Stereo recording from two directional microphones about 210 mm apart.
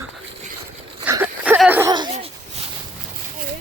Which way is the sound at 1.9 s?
25° right (ahead or behind).